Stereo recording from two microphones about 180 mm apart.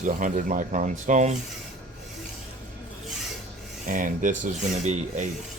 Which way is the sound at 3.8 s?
45° right (ahead or behind).